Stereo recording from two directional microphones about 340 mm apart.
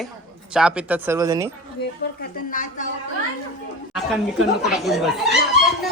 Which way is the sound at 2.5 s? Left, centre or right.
Left.